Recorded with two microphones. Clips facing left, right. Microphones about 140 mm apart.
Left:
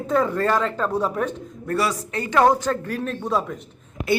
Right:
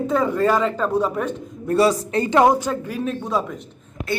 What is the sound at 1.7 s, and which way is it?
Speech, 25° right (ahead or behind).